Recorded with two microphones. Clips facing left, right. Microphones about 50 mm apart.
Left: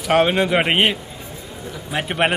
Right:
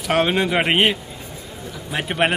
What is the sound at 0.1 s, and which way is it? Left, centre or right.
Speech, centre.